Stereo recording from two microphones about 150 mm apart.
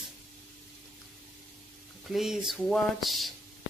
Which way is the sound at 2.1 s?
5° right (ahead or behind).